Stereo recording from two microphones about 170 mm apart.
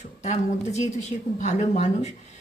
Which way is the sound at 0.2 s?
40° left (ahead or behind).